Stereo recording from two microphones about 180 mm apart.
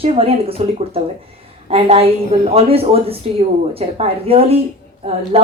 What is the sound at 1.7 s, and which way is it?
A woman's voice, 35° right (ahead or behind).